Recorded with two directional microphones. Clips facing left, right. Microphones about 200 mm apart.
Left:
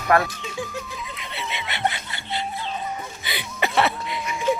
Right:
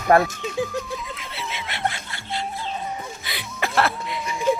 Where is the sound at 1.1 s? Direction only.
Centre (ahead or behind).